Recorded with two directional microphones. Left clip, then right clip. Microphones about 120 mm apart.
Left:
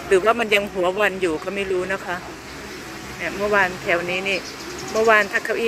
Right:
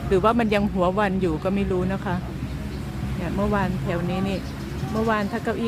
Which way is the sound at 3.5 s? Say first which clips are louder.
Left 7 dB; 20° left (ahead or behind).